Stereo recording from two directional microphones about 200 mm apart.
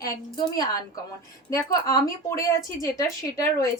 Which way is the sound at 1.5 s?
15° left (ahead or behind).